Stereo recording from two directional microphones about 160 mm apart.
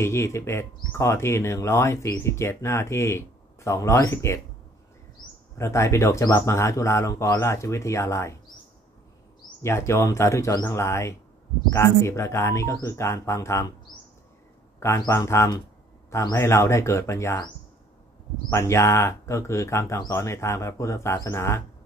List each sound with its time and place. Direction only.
0.0 s speech: 15° left (ahead or behind)
5.6 s speech: 15° left (ahead or behind)
9.6 s speech: 15° left (ahead or behind)
14.8 s speech: 15° left (ahead or behind)
18.5 s speech: 15° left (ahead or behind)